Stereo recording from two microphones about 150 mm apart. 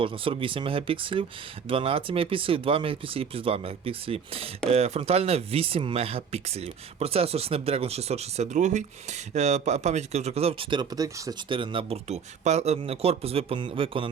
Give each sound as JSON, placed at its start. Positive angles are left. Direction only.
{"t": 0.0, "sound": "speech", "side_deg": -35}
{"t": 10.5, "sound": "speech", "side_deg": -30}